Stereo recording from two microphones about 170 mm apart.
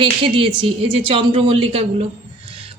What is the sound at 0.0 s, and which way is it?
A man's voice, 30° right (ahead or behind).